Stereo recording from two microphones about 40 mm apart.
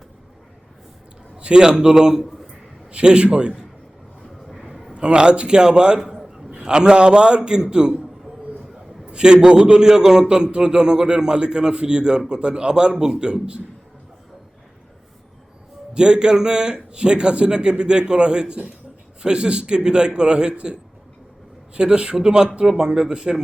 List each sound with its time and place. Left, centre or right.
1.4 s a man's voice: right
4.7 s a sound: centre
4.9 s a man's voice: right
6.0 s a sound: centre
6.7 s a man's voice: right
9.0 s a man's voice: right
16.0 s a man's voice: right
21.8 s a man's voice: right